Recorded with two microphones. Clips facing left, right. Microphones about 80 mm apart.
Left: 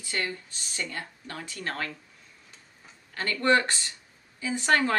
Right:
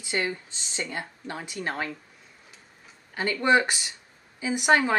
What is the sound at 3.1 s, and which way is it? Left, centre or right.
Speech, centre.